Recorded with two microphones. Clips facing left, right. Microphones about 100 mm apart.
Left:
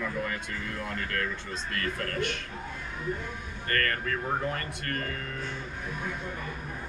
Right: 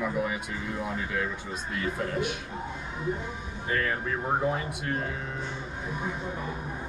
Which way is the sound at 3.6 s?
10° right (ahead or behind).